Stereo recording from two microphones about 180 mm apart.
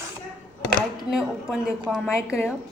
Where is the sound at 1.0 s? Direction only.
5° right (ahead or behind).